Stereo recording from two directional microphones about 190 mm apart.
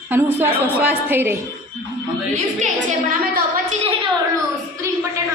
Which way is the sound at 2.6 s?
40° right (ahead or behind).